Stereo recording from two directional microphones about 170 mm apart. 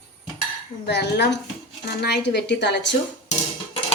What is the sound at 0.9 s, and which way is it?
Speech, 80° left.